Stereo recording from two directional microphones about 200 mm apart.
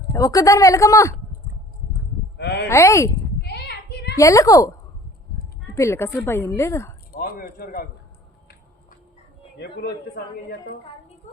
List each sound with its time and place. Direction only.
0.1 s a woman's voice: 15° left (ahead or behind)
2.4 s speech: 55° left (ahead or behind)
2.6 s a woman's voice: 15° left (ahead or behind)
3.4 s a sound: 55° left (ahead or behind)
4.2 s a woman's voice: 15° left (ahead or behind)
5.7 s a woman's voice: 15° left (ahead or behind)
7.1 s a man's voice: 45° left (ahead or behind)
9.6 s speech: 55° left (ahead or behind)